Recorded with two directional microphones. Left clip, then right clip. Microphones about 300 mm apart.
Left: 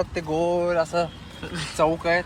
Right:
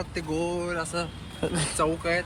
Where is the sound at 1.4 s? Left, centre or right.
Centre.